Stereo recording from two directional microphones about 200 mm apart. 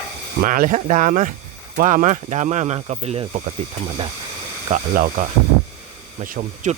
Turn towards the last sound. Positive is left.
turn(degrees=-40)  # may be behind; listen again after turning